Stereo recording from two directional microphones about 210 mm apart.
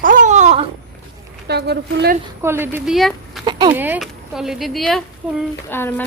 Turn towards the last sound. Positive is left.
turn(degrees=10)  # may be behind; listen again after turning